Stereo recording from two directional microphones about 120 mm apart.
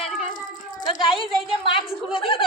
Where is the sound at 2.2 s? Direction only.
50° left (ahead or behind).